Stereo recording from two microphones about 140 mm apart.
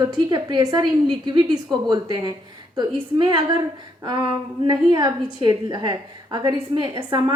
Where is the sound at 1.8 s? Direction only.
30° right (ahead or behind).